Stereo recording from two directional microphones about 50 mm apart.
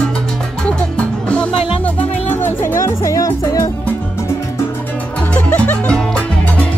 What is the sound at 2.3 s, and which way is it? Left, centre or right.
Music, left.